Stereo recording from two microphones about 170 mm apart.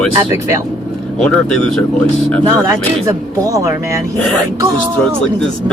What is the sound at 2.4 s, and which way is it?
Speech, 20° right (ahead or behind).